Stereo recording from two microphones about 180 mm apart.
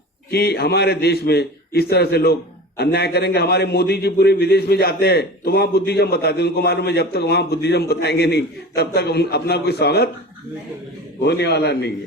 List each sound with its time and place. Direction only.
0.3 s a man's voice: 65° left (ahead or behind)
11.2 s a man's voice: 65° left (ahead or behind)